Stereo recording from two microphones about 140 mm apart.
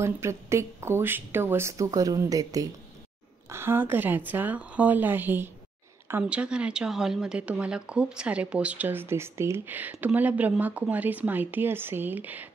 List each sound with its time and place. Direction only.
0.0 s speech: 20° right (ahead or behind)